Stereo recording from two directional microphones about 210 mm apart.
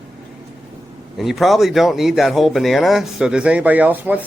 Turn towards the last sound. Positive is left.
turn(degrees=-5)  # may be behind; listen again after turning